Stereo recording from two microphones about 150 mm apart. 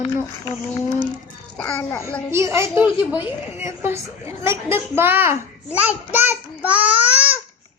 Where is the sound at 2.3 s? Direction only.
20° right (ahead or behind).